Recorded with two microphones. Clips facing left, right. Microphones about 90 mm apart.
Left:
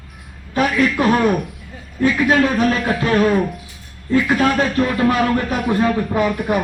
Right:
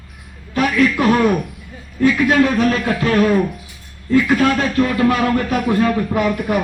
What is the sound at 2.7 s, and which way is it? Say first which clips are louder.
A man's voice: even; 20° left (ahead or behind).